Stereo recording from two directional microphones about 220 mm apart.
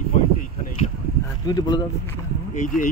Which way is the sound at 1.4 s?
20° left (ahead or behind).